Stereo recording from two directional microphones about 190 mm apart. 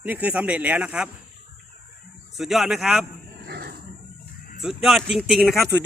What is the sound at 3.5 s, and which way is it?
Wild animals, 55° right (ahead or behind).